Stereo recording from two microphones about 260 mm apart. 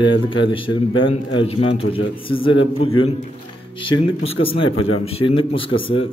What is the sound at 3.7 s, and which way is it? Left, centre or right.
Speech, left.